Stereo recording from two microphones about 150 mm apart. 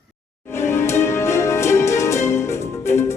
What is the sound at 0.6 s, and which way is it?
Music, 15° left (ahead or behind).